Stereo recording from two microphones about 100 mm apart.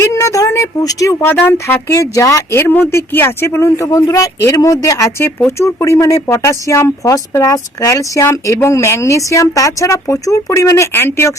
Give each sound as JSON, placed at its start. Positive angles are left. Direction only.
{"t": 0.0, "sound": "speech", "side_deg": 30}
{"t": 1.3, "sound": "speech", "side_deg": 20}